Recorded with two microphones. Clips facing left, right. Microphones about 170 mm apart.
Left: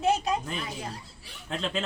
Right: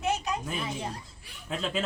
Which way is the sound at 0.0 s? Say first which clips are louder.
Left 4 dB; 30° left (ahead or behind).